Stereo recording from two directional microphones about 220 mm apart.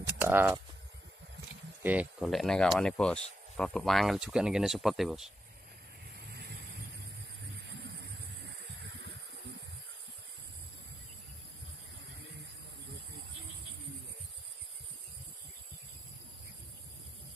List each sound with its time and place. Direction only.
0.2 s speech: 10° right (ahead or behind)
1.8 s speech: 5° right (ahead or behind)
6.1 s vehicle: 45° right (ahead or behind)
7.7 s vehicle: 50° right (ahead or behind)